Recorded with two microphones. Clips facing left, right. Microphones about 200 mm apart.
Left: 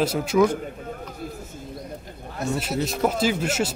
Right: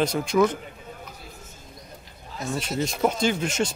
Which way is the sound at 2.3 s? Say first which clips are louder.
Left 4 dB; 65° left (ahead or behind).